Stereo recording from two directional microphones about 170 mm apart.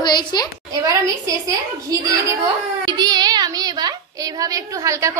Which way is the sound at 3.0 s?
25° right (ahead or behind).